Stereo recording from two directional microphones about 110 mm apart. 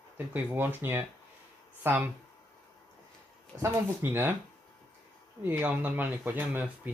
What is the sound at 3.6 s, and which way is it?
Speech, 25° right (ahead or behind).